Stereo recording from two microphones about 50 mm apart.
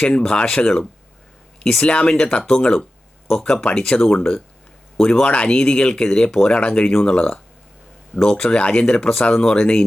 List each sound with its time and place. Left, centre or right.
0.0 s speech: left